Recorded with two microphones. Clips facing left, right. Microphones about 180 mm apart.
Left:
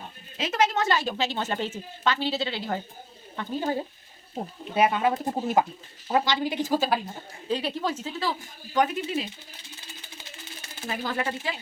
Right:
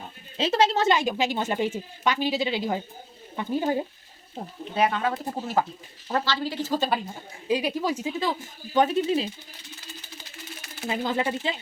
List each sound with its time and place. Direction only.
0.3 s speech: 30° right (ahead or behind)
0.9 s speech: 15° right (ahead or behind)
4.7 s speech: 15° left (ahead or behind)
7.4 s speech: 10° right (ahead or behind); by 9.3 s 30° right (ahead or behind)
10.8 s speech: 20° right (ahead or behind)